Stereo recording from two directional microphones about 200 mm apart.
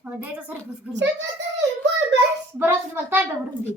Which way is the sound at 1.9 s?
65° right (ahead or behind).